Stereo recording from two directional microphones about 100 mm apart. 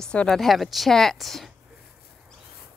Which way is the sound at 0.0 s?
10° left (ahead or behind).